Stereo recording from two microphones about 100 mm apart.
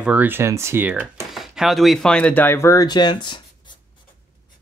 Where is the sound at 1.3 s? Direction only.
5° right (ahead or behind); by 3.7 s 50° left (ahead or behind).